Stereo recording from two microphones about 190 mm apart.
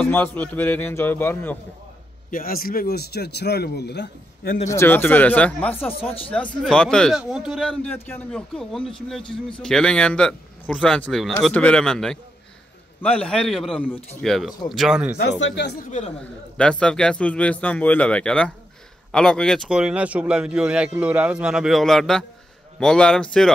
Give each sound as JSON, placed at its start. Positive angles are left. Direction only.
{"t": 0.0, "sound": "a man's voice", "side_deg": 10}
{"t": 2.3, "sound": "a man's voice", "side_deg": 50}
{"t": 4.6, "sound": "a man's voice", "side_deg": 10}
{"t": 15.1, "sound": "a man's voice", "side_deg": 70}
{"t": 16.5, "sound": "a man's voice", "side_deg": 5}